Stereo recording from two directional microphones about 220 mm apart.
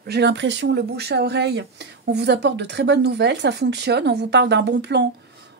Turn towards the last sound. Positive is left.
turn(degrees=-50)  # may be behind; listen again after turning